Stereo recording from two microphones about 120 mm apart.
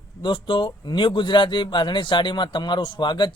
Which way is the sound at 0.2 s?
40° left (ahead or behind).